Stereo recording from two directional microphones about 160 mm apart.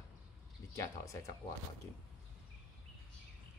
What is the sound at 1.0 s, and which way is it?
Speech, 20° left (ahead or behind).